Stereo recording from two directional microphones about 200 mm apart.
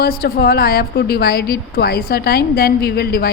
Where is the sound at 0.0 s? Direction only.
50° left (ahead or behind).